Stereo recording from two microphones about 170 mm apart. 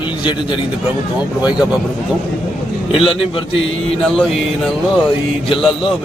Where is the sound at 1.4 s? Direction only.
5° right (ahead or behind).